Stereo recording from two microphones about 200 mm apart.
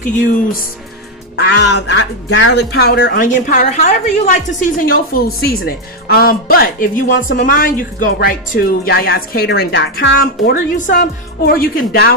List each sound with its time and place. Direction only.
0.0 s speech: 40° left (ahead or behind)
1.4 s speech: 60° left (ahead or behind)